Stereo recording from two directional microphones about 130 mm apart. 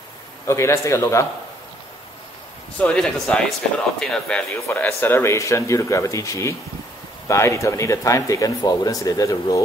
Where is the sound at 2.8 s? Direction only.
5° left (ahead or behind).